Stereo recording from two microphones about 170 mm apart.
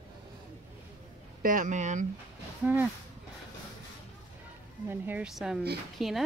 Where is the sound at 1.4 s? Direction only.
50° right (ahead or behind).